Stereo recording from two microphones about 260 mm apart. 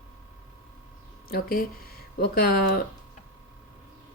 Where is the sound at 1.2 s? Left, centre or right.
Left.